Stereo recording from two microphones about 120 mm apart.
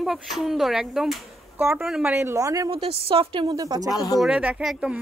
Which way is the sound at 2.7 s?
50° right (ahead or behind).